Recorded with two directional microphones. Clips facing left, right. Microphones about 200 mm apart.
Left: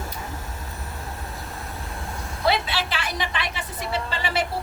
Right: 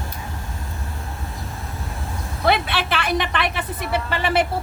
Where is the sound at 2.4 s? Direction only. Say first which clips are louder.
Right 3 dB; 60° right (ahead or behind).